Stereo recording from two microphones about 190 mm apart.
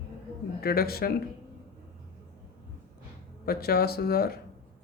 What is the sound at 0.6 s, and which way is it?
Speech, 55° left (ahead or behind).